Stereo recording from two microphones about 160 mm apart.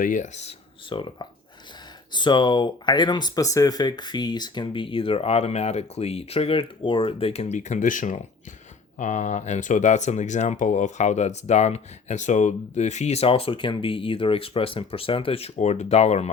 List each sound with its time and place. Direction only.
0.0 s speech: 50° left (ahead or behind)